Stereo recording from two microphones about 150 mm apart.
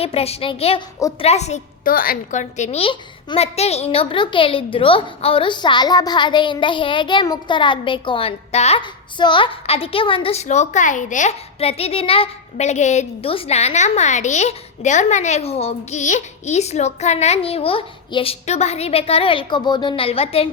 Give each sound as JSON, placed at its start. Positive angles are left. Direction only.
{"t": 0.0, "sound": "a woman's voice", "side_deg": 40}
{"t": 1.8, "sound": "a woman's voice", "side_deg": 70}
{"t": 8.8, "sound": "a woman's voice", "side_deg": 30}